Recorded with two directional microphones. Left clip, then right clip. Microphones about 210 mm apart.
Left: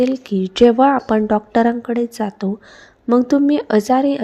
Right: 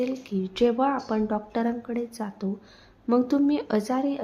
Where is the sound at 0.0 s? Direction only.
35° left (ahead or behind).